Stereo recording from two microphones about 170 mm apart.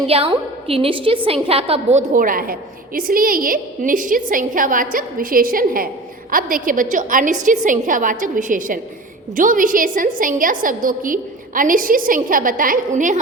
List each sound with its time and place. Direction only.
0.1 s a woman's voice: 35° right (ahead or behind); by 13.1 s 50° right (ahead or behind)